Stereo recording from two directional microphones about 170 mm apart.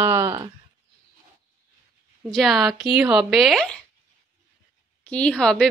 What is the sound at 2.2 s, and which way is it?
A woman's voice, centre (ahead or behind).